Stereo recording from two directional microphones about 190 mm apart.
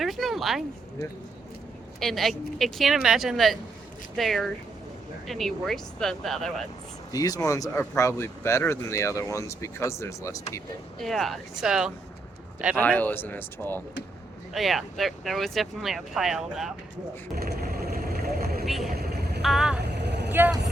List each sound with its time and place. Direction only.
0.0 s a sound: centre (ahead or behind)
2.0 s speech: centre (ahead or behind)
7.1 s speech: 20° left (ahead or behind)
11.0 s speech: centre (ahead or behind)
12.7 s speech: 10° left (ahead or behind)
17.3 s vehicle: 55° right (ahead or behind)
18.6 s speech: centre (ahead or behind)
18.9 s vehicle: 55° right (ahead or behind)
19.4 s speech: centre (ahead or behind)
19.8 s vehicle: 60° right (ahead or behind)
20.3 s speech: 10° right (ahead or behind)